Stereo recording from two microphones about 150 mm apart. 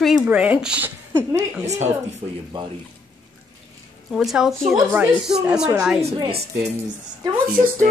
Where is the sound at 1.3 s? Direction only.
50° right (ahead or behind).